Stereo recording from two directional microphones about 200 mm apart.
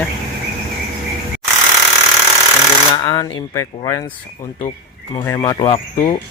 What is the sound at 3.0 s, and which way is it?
Speech, 15° left (ahead or behind).